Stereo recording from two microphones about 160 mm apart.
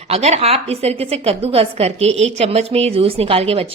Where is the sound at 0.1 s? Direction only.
40° right (ahead or behind).